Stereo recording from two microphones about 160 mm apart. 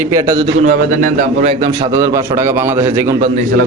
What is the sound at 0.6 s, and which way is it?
Speech, 55° right (ahead or behind).